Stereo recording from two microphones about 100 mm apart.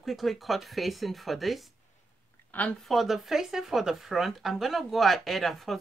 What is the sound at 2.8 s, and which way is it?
Speech, centre (ahead or behind).